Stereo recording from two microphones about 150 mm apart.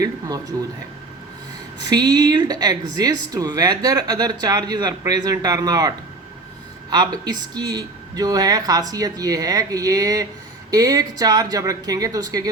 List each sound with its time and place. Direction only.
1.8 s speech: 25° right (ahead or behind)
6.9 s speech: 25° right (ahead or behind)